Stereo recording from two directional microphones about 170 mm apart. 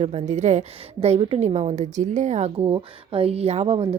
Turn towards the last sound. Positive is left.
turn(degrees=-35)  # may be behind; listen again after turning